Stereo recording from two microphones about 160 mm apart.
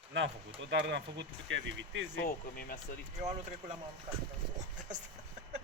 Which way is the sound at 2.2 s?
65° left (ahead or behind).